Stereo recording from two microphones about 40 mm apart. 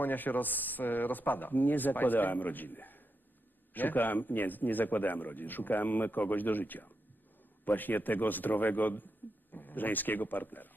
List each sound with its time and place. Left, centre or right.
0.0 s a man's voice: left